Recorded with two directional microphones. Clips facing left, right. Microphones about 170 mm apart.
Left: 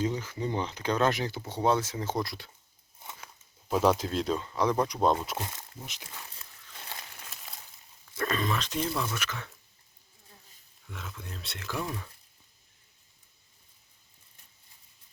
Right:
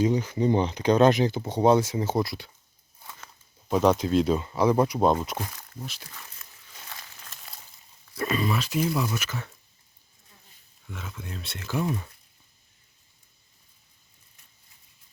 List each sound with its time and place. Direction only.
0.0 s speech: 15° right (ahead or behind)
3.0 s a sound: 20° left (ahead or behind)
3.7 s speech: centre (ahead or behind)
5.4 s speech: 20° left (ahead or behind)
8.2 s speech: 5° right (ahead or behind)
10.8 s speech: centre (ahead or behind)